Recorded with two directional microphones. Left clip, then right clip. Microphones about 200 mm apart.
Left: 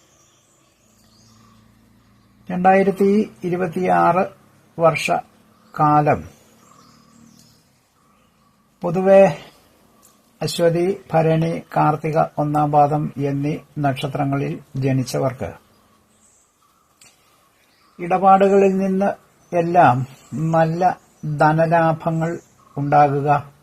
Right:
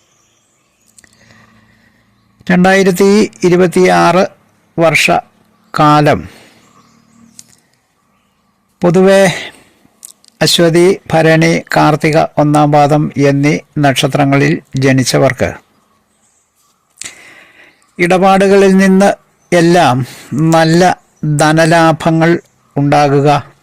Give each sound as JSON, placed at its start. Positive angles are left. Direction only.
{"t": 2.4, "sound": "speech", "side_deg": -50}
{"t": 8.8, "sound": "speech", "side_deg": -50}
{"t": 10.3, "sound": "speech", "side_deg": -45}
{"t": 17.9, "sound": "speech", "side_deg": -50}